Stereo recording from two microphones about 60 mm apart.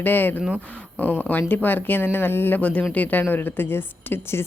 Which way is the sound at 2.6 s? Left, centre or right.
Left.